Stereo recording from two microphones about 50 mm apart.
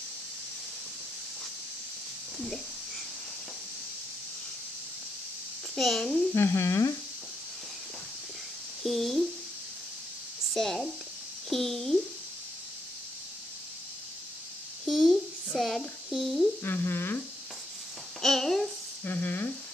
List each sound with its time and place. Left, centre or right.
5.8 s a child's voice: centre
6.3 s speech: left
8.8 s speech: centre
10.5 s speech: centre
14.9 s a sound: centre
16.1 s speech: centre
16.6 s speech: left
18.2 s speech: centre
19.0 s speech: left